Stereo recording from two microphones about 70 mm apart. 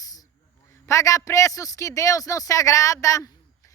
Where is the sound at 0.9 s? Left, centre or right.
Left.